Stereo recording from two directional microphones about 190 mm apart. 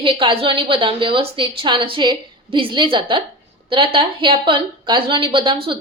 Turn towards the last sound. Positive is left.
turn(degrees=-25)  # may be behind; listen again after turning